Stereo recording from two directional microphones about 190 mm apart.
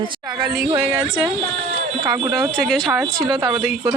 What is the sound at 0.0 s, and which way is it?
Speech, 25° right (ahead or behind).